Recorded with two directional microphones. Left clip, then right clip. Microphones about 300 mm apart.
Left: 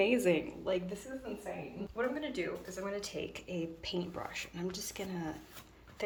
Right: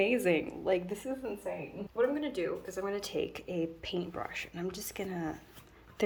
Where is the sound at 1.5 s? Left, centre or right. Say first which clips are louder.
Right 3 dB; right; by 5.3 s centre.